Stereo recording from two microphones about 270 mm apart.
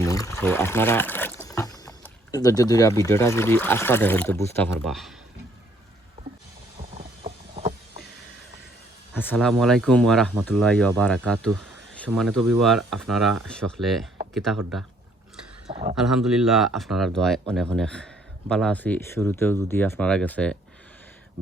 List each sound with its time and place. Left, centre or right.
0.0 s pour: centre
0.3 s rowboat: centre
2.3 s speech: centre
6.9 s vehicle: right
9.1 s speech: centre
15.7 s a man's voice: right
16.0 s speech: centre